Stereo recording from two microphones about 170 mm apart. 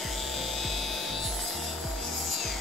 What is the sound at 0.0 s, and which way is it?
Music, centre (ahead or behind).